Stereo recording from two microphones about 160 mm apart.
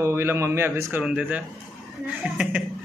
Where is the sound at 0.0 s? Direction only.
15° right (ahead or behind).